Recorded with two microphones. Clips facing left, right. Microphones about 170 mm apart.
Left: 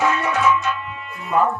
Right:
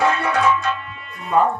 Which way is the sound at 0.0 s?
35° right (ahead or behind).